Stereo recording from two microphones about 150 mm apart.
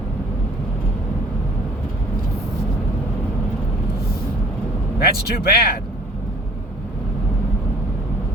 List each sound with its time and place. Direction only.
4.9 s speech: 90° left